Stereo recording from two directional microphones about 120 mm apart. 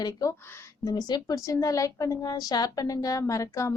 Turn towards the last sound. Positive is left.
turn(degrees=25)  # may be behind; listen again after turning